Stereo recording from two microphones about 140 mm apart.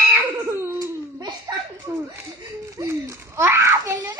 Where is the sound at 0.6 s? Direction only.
25° right (ahead or behind).